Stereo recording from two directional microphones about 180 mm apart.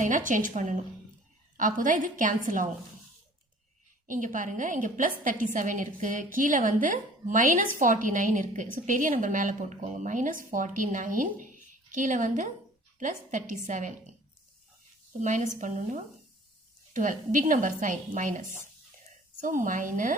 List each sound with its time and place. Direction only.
0.0 s a woman's voice: 45° right (ahead or behind)
4.0 s a woman's voice: 45° right (ahead or behind)
15.2 s a woman's voice: 40° right (ahead or behind)